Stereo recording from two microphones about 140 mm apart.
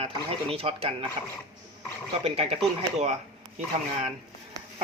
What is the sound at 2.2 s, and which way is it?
Speech, 45° right (ahead or behind).